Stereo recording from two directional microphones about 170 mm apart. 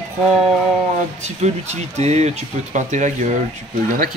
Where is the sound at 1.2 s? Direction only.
40° right (ahead or behind).